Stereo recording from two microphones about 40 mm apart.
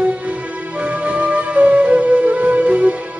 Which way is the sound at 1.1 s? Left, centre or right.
Right.